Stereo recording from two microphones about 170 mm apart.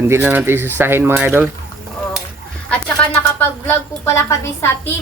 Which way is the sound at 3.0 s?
5° left (ahead or behind).